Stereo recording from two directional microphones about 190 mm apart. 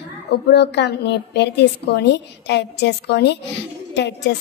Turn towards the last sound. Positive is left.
turn(degrees=65)  # may be behind; listen again after turning